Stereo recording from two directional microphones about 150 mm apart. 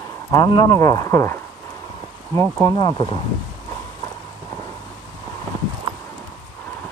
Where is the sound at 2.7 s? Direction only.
30° left (ahead or behind).